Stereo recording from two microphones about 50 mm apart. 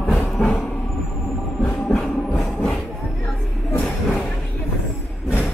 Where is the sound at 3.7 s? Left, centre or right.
Left.